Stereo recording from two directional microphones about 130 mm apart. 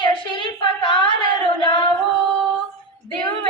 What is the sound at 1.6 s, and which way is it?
Singing, 40° left (ahead or behind).